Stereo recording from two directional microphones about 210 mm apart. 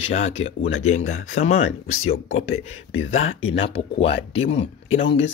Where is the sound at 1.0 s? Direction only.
75° left (ahead or behind).